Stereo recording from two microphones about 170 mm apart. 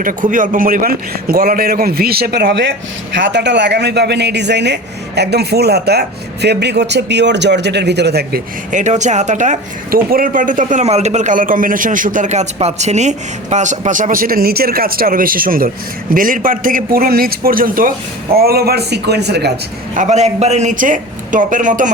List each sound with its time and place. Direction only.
0.0 s a man's voice: 50° right (ahead or behind); by 2.6 s 70° right (ahead or behind)
3.2 s a man's voice: 90° right; by 8.4 s 75° right (ahead or behind)
8.7 s a man's voice: 45° right (ahead or behind); by 19.5 s 80° right
19.9 s speech: 45° right (ahead or behind)